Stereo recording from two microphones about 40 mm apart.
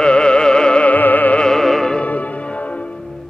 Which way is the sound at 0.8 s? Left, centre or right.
Left.